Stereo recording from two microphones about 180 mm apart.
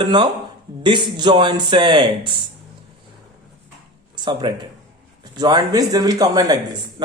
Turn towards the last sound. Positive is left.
turn(degrees=-20)  # may be behind; listen again after turning